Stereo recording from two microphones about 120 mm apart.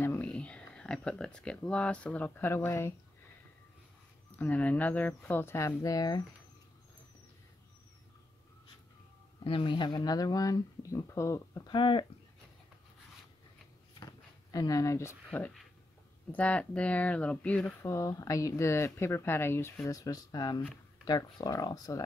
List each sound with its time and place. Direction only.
0.0 s speech: 15° left (ahead or behind)
4.4 s speech: 15° left (ahead or behind); by 6.2 s 30° left (ahead or behind)
9.4 s speech: 45° left (ahead or behind); by 11.7 s 25° left (ahead or behind)
11.7 s speech: 45° left (ahead or behind)
13.9 s a sound: 30° left (ahead or behind)
16.3 s speech: 10° left (ahead or behind)
17.8 s speech: 25° left (ahead or behind)